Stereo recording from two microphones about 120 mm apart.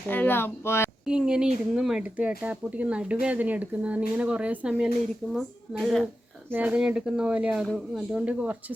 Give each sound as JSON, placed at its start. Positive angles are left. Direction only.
{"t": 0.1, "sound": "speech", "side_deg": 15}
{"t": 1.0, "sound": "speech", "side_deg": -5}
{"t": 6.5, "sound": "speech", "side_deg": -15}